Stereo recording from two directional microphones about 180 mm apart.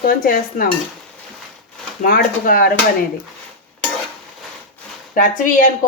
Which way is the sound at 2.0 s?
50° left (ahead or behind).